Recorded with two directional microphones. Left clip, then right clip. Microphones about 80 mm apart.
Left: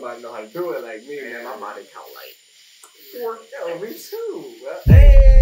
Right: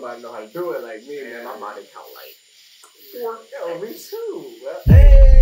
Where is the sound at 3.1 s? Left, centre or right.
Left.